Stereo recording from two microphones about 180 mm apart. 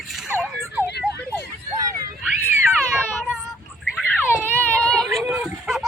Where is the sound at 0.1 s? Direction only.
Centre (ahead or behind).